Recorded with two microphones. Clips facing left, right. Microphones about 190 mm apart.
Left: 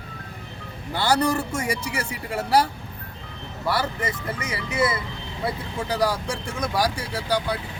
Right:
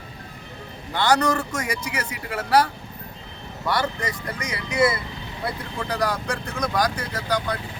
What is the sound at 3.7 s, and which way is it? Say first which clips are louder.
Speech: right 1 dB; 5° left (ahead or behind).